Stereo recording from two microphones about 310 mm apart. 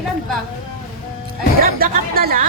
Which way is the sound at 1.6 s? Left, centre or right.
Right.